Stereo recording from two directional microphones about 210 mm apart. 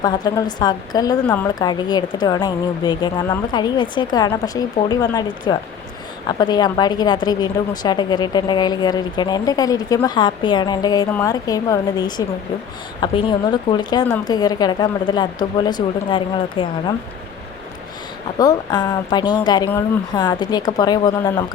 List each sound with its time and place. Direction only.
0.0 s a woman's voice: 20° left (ahead or behind)
18.3 s a woman's voice: 20° left (ahead or behind)